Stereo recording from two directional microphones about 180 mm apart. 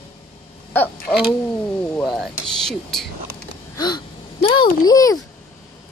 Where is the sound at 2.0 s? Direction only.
Centre (ahead or behind).